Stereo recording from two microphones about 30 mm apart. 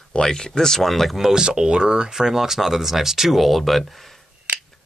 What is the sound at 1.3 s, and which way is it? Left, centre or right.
Speech, right.